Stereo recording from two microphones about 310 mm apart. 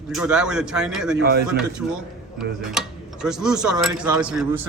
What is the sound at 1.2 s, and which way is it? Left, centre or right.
Speech, right.